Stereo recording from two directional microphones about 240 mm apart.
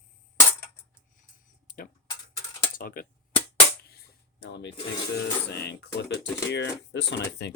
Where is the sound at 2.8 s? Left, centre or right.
Left.